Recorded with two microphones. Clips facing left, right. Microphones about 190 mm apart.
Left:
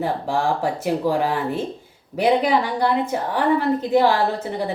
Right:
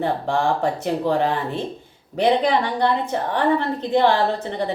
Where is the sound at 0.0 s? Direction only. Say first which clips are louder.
Right 1 dB; 5° left (ahead or behind).